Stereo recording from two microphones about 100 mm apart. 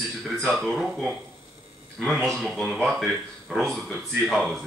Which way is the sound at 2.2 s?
5° left (ahead or behind).